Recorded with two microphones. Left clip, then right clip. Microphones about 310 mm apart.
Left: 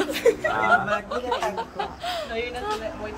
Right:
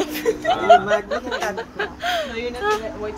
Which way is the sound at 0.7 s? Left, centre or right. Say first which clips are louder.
Right 9 dB; centre.